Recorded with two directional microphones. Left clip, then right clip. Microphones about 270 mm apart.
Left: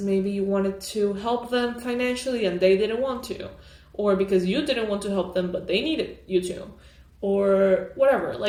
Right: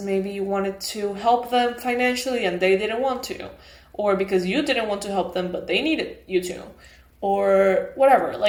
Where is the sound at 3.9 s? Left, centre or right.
Centre.